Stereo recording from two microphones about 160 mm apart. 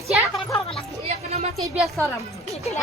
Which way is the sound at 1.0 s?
40° right (ahead or behind).